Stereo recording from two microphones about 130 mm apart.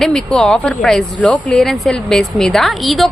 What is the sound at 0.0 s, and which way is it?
Speech, 5° left (ahead or behind).